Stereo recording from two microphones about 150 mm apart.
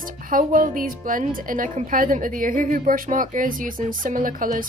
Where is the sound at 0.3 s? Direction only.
65° right (ahead or behind).